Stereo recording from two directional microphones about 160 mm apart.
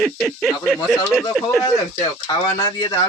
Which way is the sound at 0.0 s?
Centre (ahead or behind).